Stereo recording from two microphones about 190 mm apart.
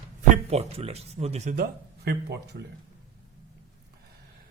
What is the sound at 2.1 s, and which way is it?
Speech, 60° right (ahead or behind).